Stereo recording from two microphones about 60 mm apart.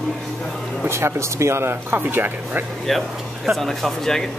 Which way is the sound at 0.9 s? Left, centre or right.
Right.